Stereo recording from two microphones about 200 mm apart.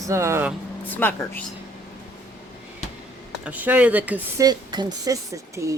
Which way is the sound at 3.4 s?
10° right (ahead or behind).